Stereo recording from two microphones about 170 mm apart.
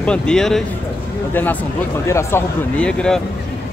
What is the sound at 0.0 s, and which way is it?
Speech, 5° left (ahead or behind).